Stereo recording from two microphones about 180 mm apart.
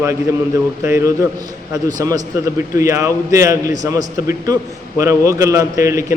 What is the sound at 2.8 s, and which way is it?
A man's voice, 15° right (ahead or behind).